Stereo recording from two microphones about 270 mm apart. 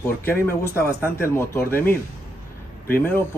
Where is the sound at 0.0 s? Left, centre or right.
Centre.